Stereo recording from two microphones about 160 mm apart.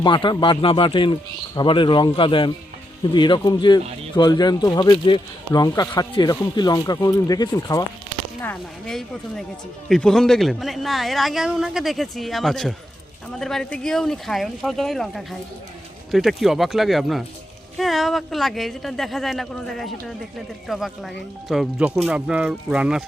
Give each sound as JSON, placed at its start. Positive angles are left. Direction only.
{"t": 0.0, "sound": "speech", "side_deg": 30}
{"t": 8.4, "sound": "a man's voice", "side_deg": 5}